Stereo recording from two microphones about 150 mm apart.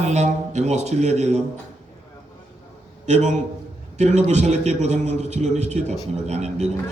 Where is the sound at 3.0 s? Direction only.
50° right (ahead or behind).